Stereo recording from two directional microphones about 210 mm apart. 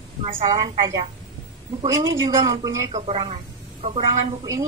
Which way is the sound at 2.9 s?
30° right (ahead or behind).